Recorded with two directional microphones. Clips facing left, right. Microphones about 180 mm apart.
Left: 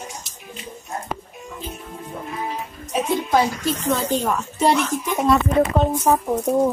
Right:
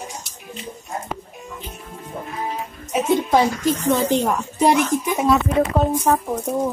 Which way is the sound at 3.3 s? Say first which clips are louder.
Right 2 dB; 20° right (ahead or behind).